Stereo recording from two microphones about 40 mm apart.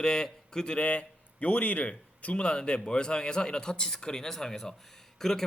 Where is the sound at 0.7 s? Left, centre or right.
Left.